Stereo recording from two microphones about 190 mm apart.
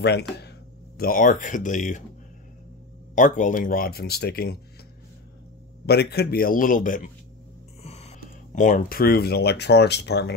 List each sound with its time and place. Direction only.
0.0 s speech: 60° left (ahead or behind); by 2.0 s 40° left (ahead or behind)
3.2 s speech: 45° left (ahead or behind)
5.9 s speech: 60° left (ahead or behind)
7.8 s speech: 35° left (ahead or behind); by 10.3 s 60° left (ahead or behind)